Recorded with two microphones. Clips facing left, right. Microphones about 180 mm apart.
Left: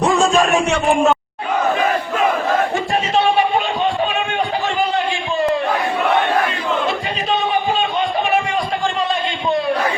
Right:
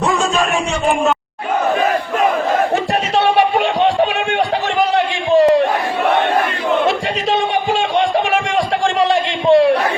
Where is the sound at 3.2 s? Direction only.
80° right.